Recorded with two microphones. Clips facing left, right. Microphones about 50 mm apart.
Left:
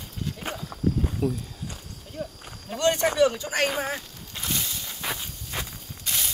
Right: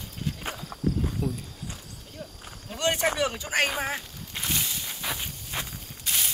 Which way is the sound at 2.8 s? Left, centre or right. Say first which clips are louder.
Left 4 dB; centre.